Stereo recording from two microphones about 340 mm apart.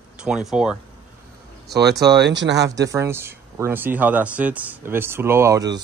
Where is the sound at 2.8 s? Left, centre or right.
Centre.